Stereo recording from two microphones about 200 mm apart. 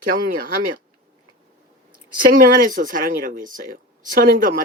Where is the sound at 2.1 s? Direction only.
45° right (ahead or behind).